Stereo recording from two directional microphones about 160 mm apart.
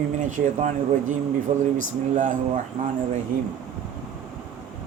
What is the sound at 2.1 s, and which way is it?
Speech, 55° right (ahead or behind).